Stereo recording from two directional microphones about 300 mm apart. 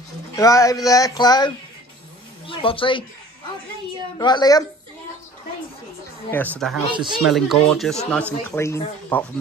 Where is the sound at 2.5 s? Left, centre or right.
Centre.